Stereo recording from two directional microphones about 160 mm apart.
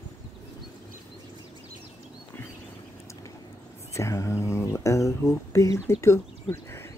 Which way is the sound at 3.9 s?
20° left (ahead or behind).